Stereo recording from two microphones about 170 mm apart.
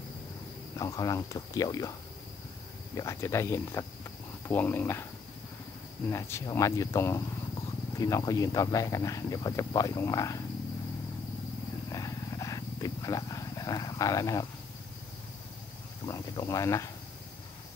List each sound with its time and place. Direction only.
0.7 s speech: 20° left (ahead or behind)
6.0 s speech: 15° left (ahead or behind)
11.9 s wild animals: 20° left (ahead or behind)
16.1 s speech: 20° left (ahead or behind)